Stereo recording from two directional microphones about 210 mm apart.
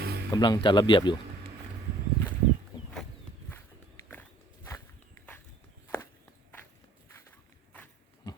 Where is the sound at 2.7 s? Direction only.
20° left (ahead or behind).